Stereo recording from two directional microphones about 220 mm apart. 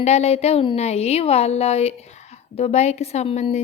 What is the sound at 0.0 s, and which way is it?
Speech, 30° left (ahead or behind).